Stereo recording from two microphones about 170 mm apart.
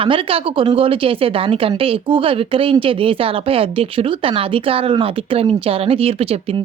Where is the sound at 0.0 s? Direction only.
30° right (ahead or behind).